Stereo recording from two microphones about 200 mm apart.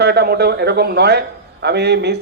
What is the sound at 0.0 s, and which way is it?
Speech, 55° right (ahead or behind).